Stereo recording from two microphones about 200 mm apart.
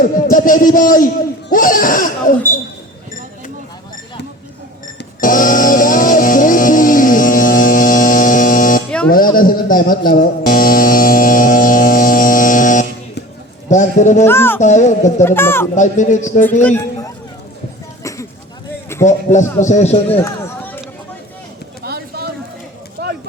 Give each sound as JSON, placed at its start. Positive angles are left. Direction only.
{"t": 0.0, "sound": "a man's voice", "side_deg": 45}
{"t": 5.2, "sound": "music", "side_deg": 45}
{"t": 13.7, "sound": "a man's voice", "side_deg": 35}
{"t": 14.3, "sound": "speech", "side_deg": 10}
{"t": 14.6, "sound": "a man's voice", "side_deg": 35}
{"t": 15.2, "sound": "speech", "side_deg": 10}
{"t": 15.7, "sound": "a man's voice", "side_deg": 35}
{"t": 16.6, "sound": "speech", "side_deg": 10}
{"t": 19.0, "sound": "a man's voice", "side_deg": 35}
{"t": 20.1, "sound": "run", "side_deg": 10}
{"t": 21.8, "sound": "a sound", "side_deg": -50}